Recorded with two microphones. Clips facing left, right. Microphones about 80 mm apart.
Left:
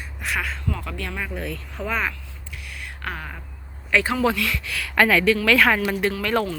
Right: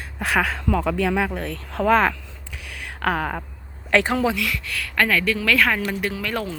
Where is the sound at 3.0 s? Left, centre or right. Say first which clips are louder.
Right 10 dB; right.